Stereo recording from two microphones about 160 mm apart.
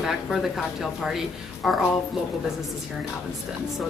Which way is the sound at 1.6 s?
5° right (ahead or behind).